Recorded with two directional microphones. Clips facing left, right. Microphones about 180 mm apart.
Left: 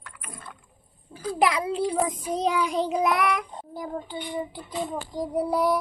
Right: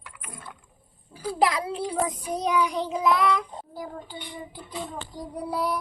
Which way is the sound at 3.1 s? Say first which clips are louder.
Right 2 dB; 25° right (ahead or behind).